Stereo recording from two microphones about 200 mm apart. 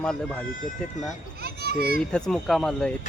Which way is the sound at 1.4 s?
50° right (ahead or behind).